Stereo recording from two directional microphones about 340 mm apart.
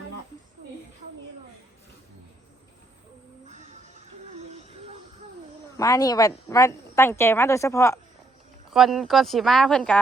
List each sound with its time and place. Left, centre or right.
3.4 s music: right
5.7 s a woman's voice: centre